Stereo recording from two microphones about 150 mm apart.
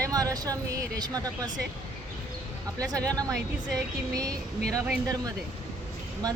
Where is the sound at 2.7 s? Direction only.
25° right (ahead or behind).